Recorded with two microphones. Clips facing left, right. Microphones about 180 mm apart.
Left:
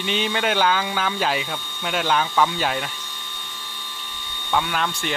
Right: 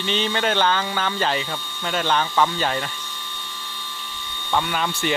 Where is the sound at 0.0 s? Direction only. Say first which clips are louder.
Even; 10° left (ahead or behind).